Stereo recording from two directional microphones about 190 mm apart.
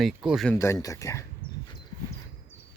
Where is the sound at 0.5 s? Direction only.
15° left (ahead or behind).